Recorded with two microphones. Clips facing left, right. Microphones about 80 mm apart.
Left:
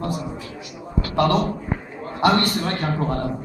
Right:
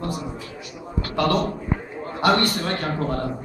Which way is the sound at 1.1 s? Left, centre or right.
Left.